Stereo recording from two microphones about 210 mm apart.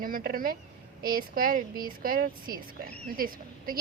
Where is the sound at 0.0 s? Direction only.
45° right (ahead or behind).